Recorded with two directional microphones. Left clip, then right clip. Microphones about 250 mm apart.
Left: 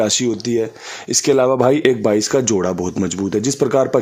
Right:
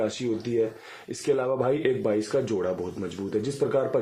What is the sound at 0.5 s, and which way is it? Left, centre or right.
Speech, left.